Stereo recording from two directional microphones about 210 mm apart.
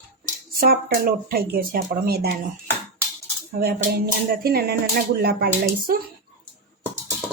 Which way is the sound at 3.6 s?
45° right (ahead or behind).